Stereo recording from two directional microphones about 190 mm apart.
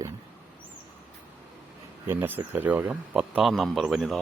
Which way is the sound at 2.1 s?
10° right (ahead or behind).